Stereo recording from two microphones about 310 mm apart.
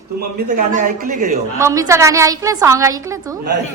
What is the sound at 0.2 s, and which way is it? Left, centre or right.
A man's voice, right.